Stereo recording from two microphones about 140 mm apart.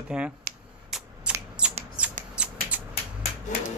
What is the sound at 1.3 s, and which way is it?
Scissors, 10° right (ahead or behind).